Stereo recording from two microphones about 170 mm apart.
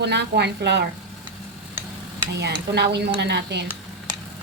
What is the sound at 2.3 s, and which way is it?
A woman's voice, 85° right.